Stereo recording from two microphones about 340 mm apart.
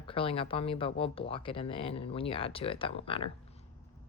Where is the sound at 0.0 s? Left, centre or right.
Centre.